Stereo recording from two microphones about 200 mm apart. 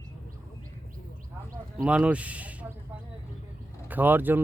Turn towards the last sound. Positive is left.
turn(degrees=-10)  # may be behind; listen again after turning